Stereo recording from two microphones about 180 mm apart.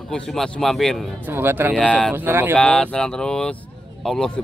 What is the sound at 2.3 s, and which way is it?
Speech, 10° right (ahead or behind).